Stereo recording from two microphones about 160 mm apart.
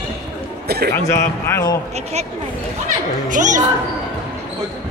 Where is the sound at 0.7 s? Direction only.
85° right.